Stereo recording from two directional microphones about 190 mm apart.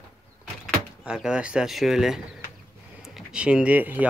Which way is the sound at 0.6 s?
5° right (ahead or behind).